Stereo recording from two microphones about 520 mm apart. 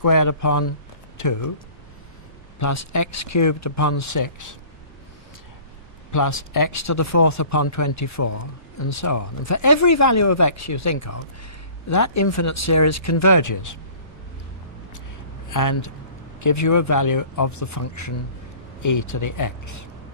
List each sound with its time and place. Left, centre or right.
0.0 s speech: left
2.6 s speech: left
6.1 s speech: left
15.5 s speech: left